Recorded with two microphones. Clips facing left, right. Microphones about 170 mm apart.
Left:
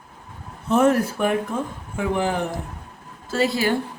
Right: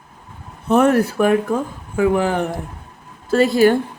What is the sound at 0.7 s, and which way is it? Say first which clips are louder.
Speech: right 3 dB; 65° right (ahead or behind).